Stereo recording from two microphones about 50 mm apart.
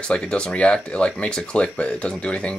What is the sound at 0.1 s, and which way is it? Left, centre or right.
Speech, centre.